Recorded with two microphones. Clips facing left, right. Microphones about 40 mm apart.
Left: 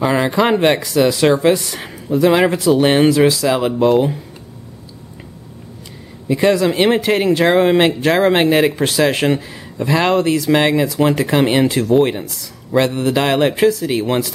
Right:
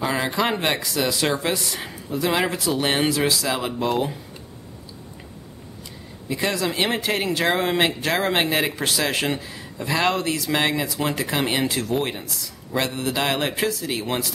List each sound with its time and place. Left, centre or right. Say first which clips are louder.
0.0 s speech: left 8 dB; centre
6.2 s speech: left 10 dB; centre